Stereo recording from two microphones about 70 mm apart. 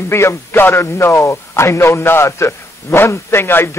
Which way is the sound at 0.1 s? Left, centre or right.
Left.